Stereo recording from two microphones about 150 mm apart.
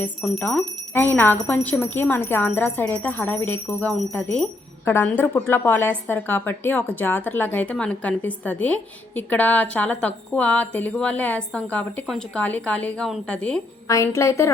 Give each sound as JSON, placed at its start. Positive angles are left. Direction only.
{"t": 0.2, "sound": "speech", "side_deg": 5}
{"t": 13.8, "sound": "a woman's voice", "side_deg": 20}